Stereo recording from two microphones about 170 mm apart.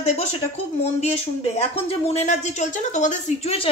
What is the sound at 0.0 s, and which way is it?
Speech, 40° left (ahead or behind).